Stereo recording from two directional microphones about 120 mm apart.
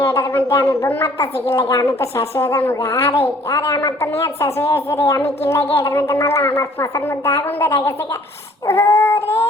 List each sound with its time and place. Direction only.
0.0 s speech: 20° left (ahead or behind)
8.6 s child singing: 20° left (ahead or behind)